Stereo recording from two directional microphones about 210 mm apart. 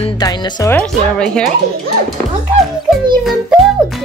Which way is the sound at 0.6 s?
10° left (ahead or behind).